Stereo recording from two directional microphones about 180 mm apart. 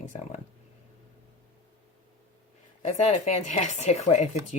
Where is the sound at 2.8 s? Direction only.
40° left (ahead or behind).